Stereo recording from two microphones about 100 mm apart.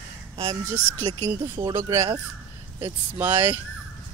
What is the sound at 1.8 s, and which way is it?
Speech, 30° right (ahead or behind).